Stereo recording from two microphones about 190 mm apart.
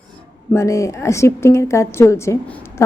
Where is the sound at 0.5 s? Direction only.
15° left (ahead or behind).